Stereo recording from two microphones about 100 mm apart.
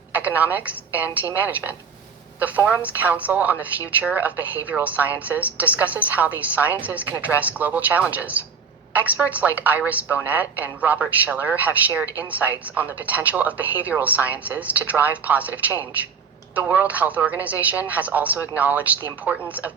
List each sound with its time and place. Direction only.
0.1 s a woman's voice: 15° right (ahead or behind)